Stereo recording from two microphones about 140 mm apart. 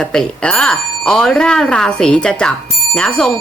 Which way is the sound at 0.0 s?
5° left (ahead or behind).